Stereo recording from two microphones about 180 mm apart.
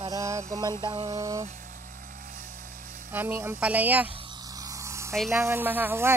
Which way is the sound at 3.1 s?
10° right (ahead or behind).